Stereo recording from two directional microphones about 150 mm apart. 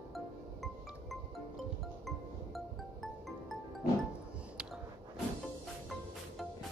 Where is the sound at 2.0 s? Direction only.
Centre (ahead or behind).